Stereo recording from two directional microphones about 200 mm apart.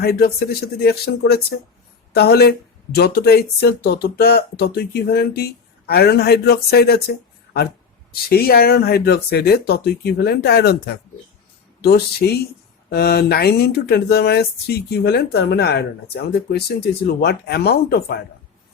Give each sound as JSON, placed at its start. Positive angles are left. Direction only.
{"t": 0.0, "sound": "speech", "side_deg": 50}